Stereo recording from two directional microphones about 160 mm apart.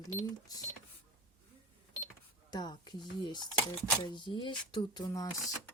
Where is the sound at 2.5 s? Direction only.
25° left (ahead or behind).